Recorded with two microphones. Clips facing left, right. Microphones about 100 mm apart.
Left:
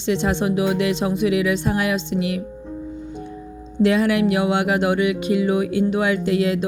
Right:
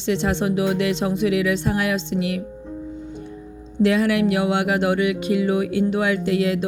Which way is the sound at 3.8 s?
25° left (ahead or behind).